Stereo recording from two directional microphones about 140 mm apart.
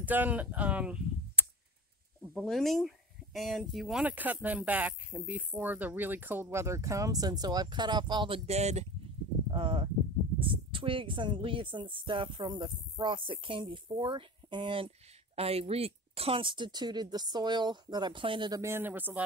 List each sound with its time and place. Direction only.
0.0 s speech: 10° right (ahead or behind)
4.0 s speech: 10° right (ahead or behind); by 8.4 s 35° right (ahead or behind)
8.5 s speech: 50° right (ahead or behind)
9.5 s speech: 40° right (ahead or behind)
18.6 s speech: 15° right (ahead or behind)